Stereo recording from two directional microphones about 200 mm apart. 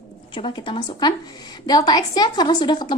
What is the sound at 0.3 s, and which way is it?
A woman's voice, 25° left (ahead or behind).